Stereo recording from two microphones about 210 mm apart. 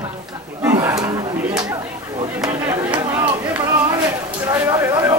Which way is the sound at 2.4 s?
15° right (ahead or behind).